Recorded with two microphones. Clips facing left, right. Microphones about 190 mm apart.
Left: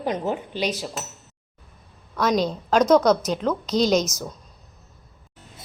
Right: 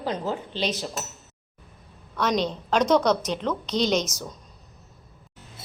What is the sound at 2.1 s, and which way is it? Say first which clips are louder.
A woman's voice: left 3 dB; 10° left (ahead or behind).